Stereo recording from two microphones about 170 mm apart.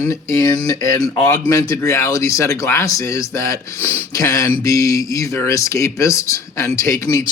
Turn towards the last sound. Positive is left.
turn(degrees=15)  # may be behind; listen again after turning